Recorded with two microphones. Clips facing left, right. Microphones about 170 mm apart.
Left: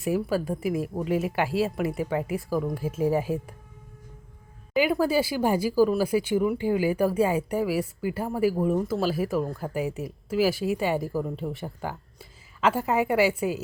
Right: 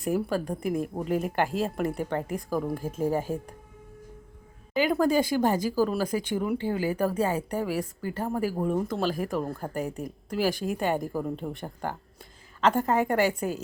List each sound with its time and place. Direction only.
0.0 s speech: 5° left (ahead or behind)
4.7 s speech: 5° left (ahead or behind)